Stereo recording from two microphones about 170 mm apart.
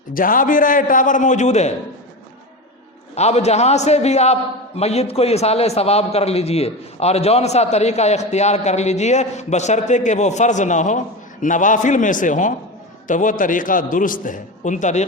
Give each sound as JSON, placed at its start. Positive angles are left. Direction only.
{"t": 0.1, "sound": "a man's voice", "side_deg": 55}
{"t": 3.2, "sound": "a man's voice", "side_deg": 40}